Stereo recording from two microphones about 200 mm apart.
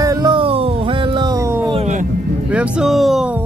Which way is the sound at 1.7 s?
35° right (ahead or behind).